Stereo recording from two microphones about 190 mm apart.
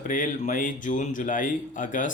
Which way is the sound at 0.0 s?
45° left (ahead or behind).